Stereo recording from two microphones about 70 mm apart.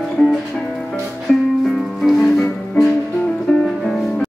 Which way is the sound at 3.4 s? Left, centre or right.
Centre.